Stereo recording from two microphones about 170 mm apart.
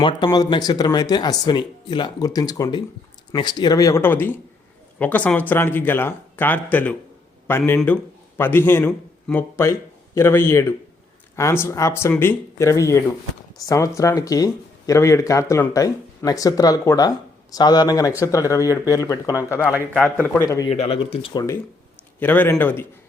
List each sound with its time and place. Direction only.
0.3 s a man's voice: 25° left (ahead or behind); by 20.4 s 5° left (ahead or behind)
20.7 s speech: 35° left (ahead or behind)
22.2 s speech: 10° left (ahead or behind)